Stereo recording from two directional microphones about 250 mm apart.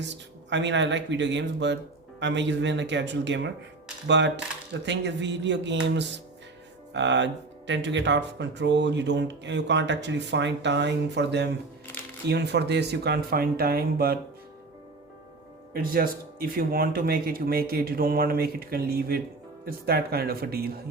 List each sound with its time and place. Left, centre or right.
0.0 s speech: right
6.9 s speech: right
15.7 s speech: right